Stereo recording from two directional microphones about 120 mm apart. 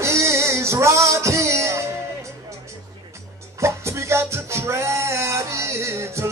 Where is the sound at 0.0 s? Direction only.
25° right (ahead or behind).